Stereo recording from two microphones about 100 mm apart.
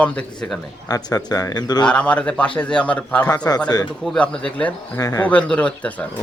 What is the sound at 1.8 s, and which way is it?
A man's voice, 10° left (ahead or behind).